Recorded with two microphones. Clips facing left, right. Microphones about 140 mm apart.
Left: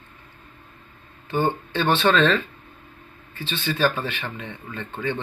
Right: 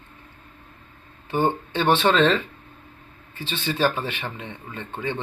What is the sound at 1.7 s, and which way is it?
Speech, 20° right (ahead or behind).